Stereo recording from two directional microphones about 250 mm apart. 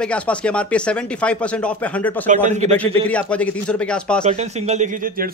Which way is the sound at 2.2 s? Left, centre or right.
Right.